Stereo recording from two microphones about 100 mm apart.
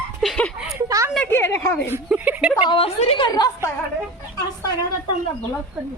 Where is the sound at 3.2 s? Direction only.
40° left (ahead or behind).